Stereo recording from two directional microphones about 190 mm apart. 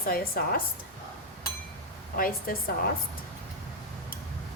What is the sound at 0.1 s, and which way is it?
Speech, 50° left (ahead or behind).